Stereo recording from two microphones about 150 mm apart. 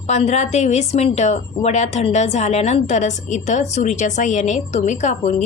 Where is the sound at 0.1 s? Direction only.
50° left (ahead or behind).